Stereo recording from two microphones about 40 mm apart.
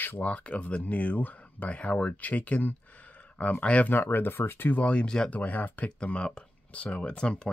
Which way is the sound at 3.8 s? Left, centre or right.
Left.